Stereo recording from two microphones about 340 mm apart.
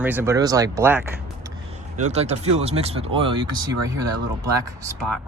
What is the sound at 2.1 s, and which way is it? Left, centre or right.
Speech, centre.